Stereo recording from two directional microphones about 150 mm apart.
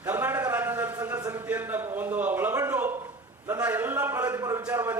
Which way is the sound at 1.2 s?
25° right (ahead or behind).